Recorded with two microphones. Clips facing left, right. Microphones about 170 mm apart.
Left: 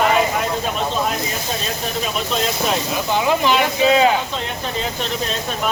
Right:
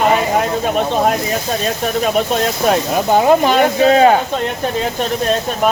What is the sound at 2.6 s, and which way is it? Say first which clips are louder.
Speech: right 6 dB; 45° right (ahead or behind).